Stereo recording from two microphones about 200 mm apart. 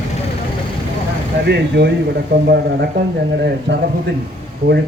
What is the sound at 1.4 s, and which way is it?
Speech, 55° right (ahead or behind).